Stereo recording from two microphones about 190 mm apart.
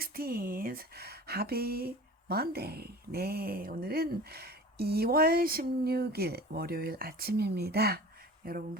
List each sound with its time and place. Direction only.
0.0 s speech: 50° right (ahead or behind)